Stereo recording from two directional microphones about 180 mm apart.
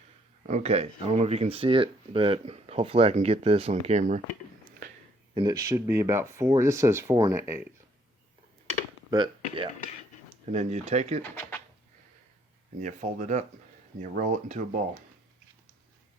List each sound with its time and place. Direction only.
0.4 s speech: 40° right (ahead or behind)
5.3 s speech: 25° right (ahead or behind)
9.0 s speech: 25° right (ahead or behind)
10.4 s speech: 40° right (ahead or behind)
11.2 s speech: 10° left (ahead or behind)
12.8 s speech: 45° right (ahead or behind)